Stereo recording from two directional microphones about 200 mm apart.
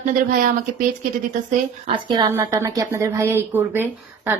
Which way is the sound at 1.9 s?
20° right (ahead or behind).